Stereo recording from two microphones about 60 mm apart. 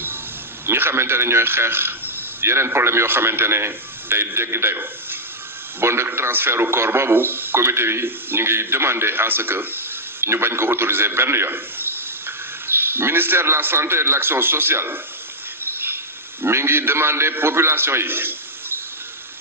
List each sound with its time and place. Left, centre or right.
0.7 s a man's voice: right